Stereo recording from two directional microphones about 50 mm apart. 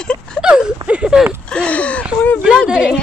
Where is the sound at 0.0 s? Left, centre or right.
Centre.